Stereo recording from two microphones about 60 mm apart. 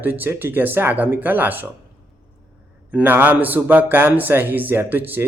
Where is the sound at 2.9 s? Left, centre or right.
Right.